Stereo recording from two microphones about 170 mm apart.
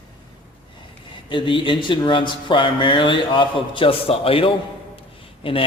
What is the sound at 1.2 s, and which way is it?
A man's voice, 30° left (ahead or behind).